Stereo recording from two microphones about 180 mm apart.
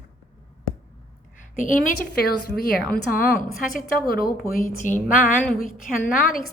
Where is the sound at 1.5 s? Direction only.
45° left (ahead or behind).